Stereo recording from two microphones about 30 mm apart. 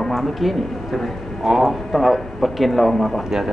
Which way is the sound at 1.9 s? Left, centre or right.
Centre.